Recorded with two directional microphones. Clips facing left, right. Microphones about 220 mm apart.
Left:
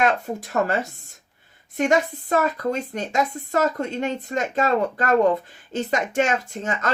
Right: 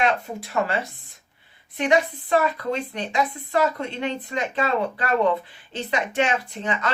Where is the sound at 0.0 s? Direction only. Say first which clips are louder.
Left 2 dB; 45° left (ahead or behind).